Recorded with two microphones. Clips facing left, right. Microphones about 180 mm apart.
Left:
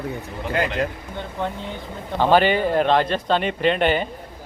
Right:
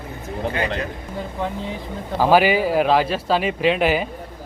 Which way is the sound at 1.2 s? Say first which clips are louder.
Right 1 dB; centre (ahead or behind).